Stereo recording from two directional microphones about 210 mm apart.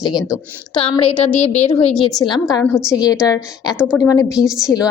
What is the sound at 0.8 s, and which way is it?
A woman's voice, 25° left (ahead or behind).